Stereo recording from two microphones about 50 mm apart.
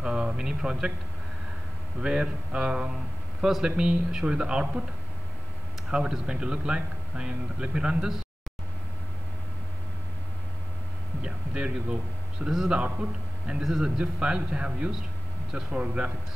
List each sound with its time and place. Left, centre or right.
0.0 s speech: centre
2.0 s speech: right
5.9 s speech: centre
11.2 s speech: centre
12.7 s speech: right